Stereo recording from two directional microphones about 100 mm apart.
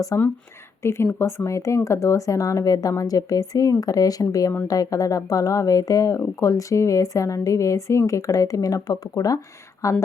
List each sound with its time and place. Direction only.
0.1 s a woman's voice: 30° left (ahead or behind)